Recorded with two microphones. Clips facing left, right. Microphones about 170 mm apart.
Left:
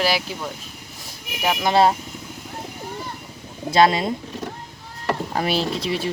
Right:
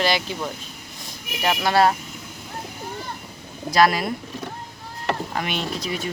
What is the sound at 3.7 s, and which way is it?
Speech, 25° left (ahead or behind).